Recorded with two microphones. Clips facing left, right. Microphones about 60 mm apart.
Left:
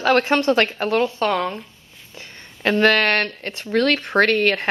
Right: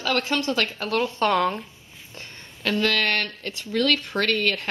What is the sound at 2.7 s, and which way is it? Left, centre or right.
Speech, left.